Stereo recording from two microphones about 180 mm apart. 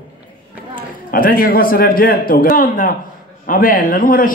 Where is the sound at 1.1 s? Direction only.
55° left (ahead or behind).